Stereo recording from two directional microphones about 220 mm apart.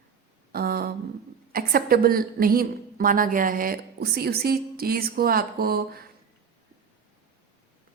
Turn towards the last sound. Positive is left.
turn(degrees=-45)  # may be behind; listen again after turning